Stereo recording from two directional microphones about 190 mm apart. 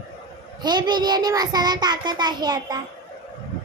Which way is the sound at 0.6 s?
20° right (ahead or behind).